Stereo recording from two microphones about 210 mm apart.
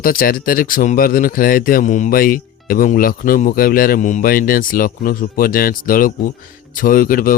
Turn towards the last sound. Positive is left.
turn(degrees=45)  # may be behind; listen again after turning